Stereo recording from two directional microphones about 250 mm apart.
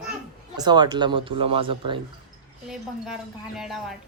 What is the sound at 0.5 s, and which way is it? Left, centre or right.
Speech, centre.